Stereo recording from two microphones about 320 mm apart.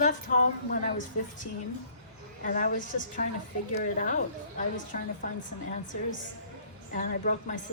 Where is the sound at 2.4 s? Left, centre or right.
Left.